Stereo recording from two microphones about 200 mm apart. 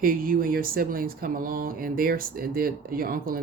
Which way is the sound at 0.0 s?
45° right (ahead or behind).